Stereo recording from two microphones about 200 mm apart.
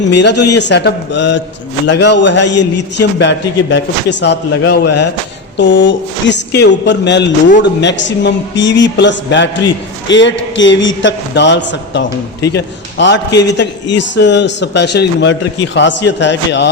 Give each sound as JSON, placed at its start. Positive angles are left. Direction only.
{"t": 0.1, "sound": "a man's voice", "side_deg": 60}